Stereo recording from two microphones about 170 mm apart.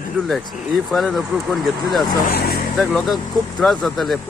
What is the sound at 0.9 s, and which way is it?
Speech, centre (ahead or behind).